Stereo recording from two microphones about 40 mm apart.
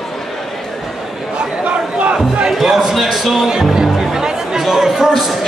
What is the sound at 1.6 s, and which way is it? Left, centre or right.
Speech, right.